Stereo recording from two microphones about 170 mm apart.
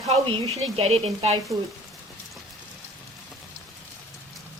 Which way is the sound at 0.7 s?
35° right (ahead or behind).